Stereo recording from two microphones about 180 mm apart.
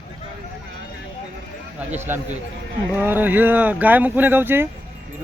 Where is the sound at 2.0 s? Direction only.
10° right (ahead or behind).